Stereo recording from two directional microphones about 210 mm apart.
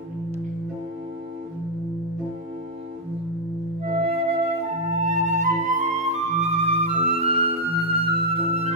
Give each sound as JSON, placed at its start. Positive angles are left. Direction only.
{"t": 3.9, "sound": "flute", "side_deg": -25}